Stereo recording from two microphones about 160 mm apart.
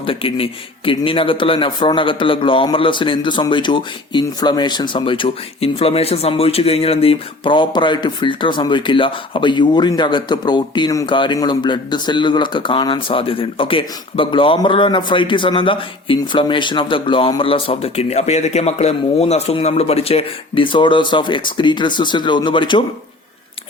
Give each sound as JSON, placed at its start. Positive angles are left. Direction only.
{"t": 0.0, "sound": "speech", "side_deg": 35}